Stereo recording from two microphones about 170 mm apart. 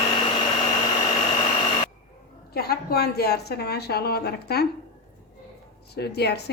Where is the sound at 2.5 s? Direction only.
70° left (ahead or behind).